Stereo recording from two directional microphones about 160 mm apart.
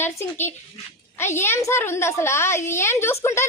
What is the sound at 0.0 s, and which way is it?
A woman's voice, 15° left (ahead or behind).